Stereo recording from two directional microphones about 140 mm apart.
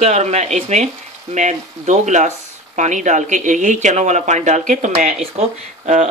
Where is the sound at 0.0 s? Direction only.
50° right (ahead or behind).